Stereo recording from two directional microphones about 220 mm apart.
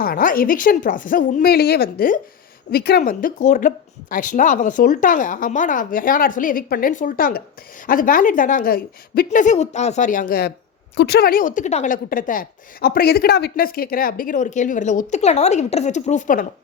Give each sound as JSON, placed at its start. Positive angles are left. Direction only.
{"t": 0.0, "sound": "a woman's voice", "side_deg": 40}